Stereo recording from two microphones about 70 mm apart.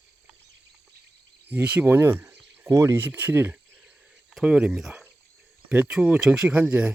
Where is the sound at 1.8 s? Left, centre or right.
Right.